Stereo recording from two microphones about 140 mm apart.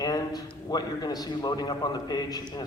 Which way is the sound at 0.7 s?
30° left (ahead or behind).